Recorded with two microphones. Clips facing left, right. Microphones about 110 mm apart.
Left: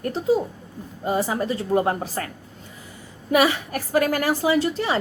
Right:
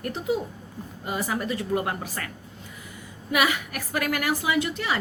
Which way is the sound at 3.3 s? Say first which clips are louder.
Left 5 dB; 30° left (ahead or behind).